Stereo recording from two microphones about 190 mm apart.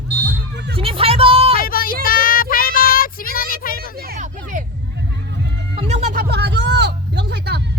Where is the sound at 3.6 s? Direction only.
50° left (ahead or behind).